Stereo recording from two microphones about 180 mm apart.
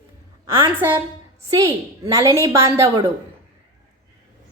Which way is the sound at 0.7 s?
10° right (ahead or behind).